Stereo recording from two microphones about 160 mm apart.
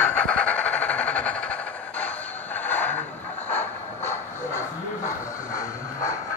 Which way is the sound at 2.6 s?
10° left (ahead or behind).